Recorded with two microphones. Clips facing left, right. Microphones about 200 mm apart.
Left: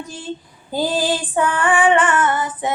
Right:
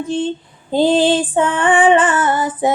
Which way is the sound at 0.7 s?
25° right (ahead or behind).